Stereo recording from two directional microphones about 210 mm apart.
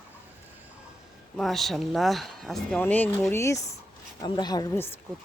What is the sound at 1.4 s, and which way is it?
Speech, centre (ahead or behind).